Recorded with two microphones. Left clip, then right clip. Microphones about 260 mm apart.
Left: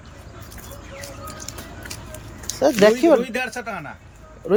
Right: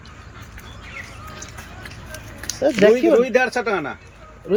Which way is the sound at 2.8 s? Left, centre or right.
Centre.